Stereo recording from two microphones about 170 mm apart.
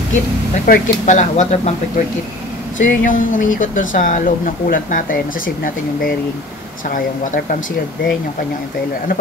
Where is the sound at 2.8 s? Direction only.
50° left (ahead or behind).